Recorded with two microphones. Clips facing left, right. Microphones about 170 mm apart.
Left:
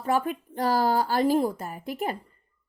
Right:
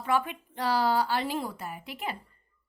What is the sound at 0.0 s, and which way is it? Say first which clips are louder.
Speech: left 3 dB; 40° left (ahead or behind).